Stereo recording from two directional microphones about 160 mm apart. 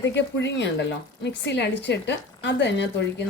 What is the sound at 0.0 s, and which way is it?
A woman's voice, 90° left.